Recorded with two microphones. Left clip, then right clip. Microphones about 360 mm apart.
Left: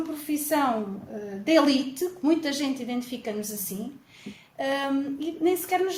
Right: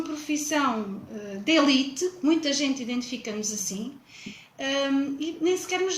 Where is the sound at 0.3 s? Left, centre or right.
Centre.